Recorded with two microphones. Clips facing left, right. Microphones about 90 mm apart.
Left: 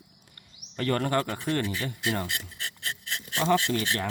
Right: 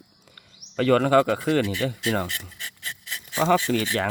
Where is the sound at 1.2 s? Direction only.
90° right.